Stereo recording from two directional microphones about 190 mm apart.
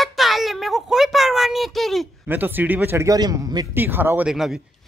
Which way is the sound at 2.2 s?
10° right (ahead or behind).